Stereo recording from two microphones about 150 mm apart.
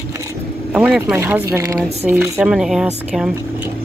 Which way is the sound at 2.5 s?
5° right (ahead or behind).